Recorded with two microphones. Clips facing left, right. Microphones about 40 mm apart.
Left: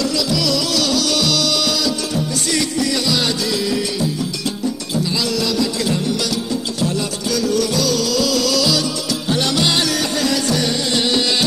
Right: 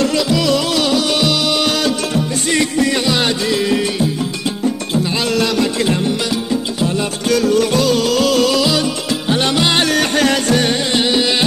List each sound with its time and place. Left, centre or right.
0.0 s music: right
5.1 s music: right
7.2 s music: right
10.9 s music: right